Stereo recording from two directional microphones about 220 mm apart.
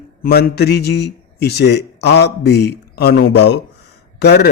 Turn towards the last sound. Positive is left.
turn(degrees=50)  # may be behind; listen again after turning